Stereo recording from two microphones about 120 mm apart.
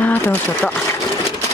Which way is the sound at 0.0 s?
15° left (ahead or behind).